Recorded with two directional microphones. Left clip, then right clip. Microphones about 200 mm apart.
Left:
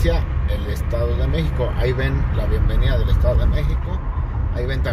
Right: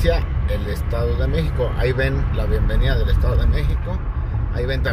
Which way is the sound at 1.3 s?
20° right (ahead or behind).